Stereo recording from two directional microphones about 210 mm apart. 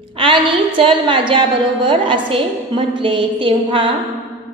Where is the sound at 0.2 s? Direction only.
25° right (ahead or behind).